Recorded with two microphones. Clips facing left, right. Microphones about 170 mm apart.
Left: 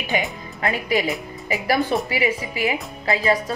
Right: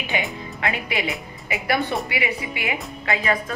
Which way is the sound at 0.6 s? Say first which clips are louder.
Left 5 dB; 40° left (ahead or behind).